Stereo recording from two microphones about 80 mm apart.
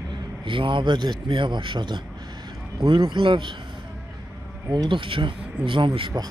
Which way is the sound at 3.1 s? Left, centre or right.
Right.